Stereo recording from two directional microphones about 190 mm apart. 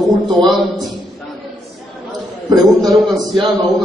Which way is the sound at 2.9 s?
20° right (ahead or behind).